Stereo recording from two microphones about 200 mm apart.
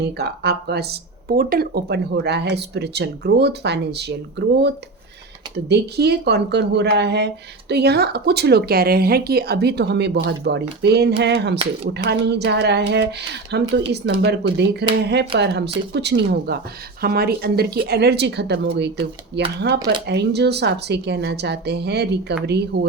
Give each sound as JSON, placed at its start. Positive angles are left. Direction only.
{"t": 0.0, "sound": "speech", "side_deg": -55}